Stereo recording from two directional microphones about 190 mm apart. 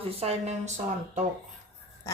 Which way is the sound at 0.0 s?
35° right (ahead or behind).